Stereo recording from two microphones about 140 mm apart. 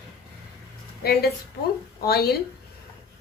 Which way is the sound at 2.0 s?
90° left.